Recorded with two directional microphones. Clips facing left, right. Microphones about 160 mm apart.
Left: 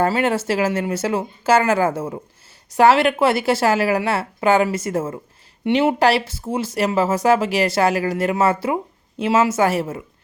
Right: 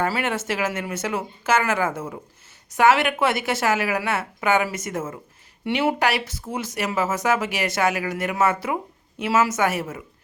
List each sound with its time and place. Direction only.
0.0 s speech: 30° left (ahead or behind)